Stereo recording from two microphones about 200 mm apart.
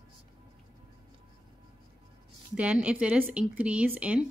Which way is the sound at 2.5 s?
5° right (ahead or behind).